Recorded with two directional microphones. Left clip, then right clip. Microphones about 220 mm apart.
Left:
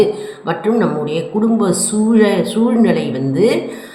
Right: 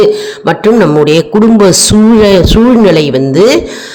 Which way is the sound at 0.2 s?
45° right (ahead or behind).